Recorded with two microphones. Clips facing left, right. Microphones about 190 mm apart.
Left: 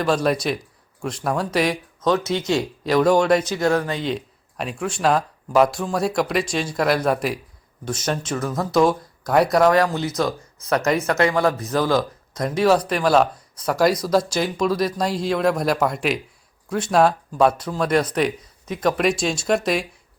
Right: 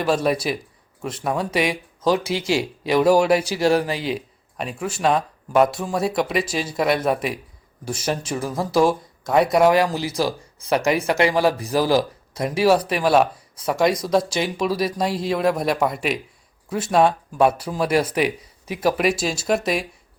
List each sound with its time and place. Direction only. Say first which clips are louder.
0.0 s speech: even; 5° right (ahead or behind)
10.1 s speech: even; 30° right (ahead or behind)
10.8 s speech: even; 10° right (ahead or behind)